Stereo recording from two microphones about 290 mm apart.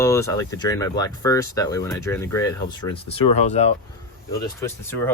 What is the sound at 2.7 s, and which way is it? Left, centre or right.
Speech, centre.